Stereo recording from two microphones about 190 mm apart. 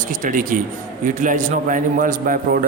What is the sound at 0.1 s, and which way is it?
A man's voice, 45° right (ahead or behind).